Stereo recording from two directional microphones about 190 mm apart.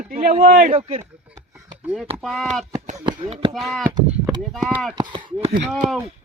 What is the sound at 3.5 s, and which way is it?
Speech, centre (ahead or behind).